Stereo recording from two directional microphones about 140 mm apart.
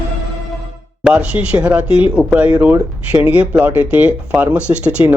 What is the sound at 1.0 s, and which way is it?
Speech, 5° right (ahead or behind).